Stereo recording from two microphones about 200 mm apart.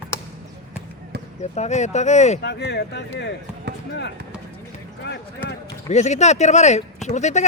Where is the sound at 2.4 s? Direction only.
55° left (ahead or behind).